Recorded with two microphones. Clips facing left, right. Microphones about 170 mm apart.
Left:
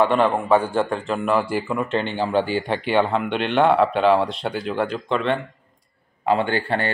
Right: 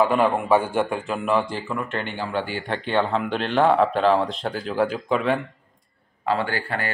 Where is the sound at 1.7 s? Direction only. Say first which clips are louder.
Left 5 dB; 20° left (ahead or behind).